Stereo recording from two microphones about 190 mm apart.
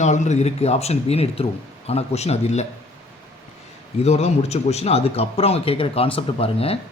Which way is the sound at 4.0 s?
35° left (ahead or behind).